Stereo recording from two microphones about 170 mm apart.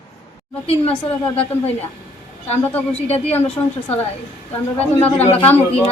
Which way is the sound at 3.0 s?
35° left (ahead or behind).